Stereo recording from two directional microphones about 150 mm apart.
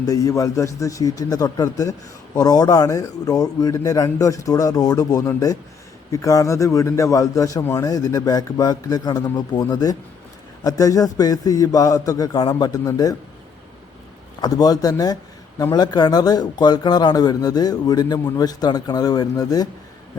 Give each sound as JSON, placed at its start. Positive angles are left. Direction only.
{"t": 0.0, "sound": "a man's voice", "side_deg": 25}
{"t": 14.4, "sound": "a man's voice", "side_deg": 25}